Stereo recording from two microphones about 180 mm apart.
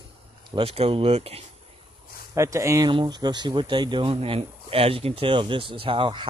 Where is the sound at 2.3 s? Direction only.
15° right (ahead or behind).